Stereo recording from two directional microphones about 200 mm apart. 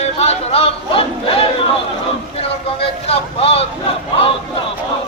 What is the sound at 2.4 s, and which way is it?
Vehicle, 30° left (ahead or behind).